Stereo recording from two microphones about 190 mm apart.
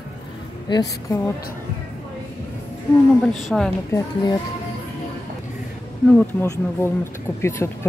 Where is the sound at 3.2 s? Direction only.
5° left (ahead or behind).